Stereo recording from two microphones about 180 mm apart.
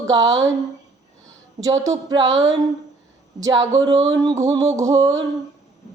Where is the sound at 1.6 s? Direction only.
20° right (ahead or behind).